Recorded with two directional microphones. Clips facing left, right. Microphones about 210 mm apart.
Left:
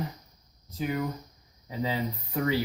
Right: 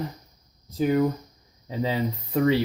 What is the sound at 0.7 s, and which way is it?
Speech, 40° right (ahead or behind).